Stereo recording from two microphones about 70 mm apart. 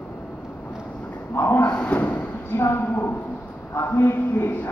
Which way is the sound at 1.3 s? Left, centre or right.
Left.